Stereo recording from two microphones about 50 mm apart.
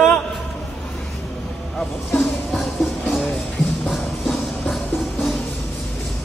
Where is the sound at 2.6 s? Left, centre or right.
Centre.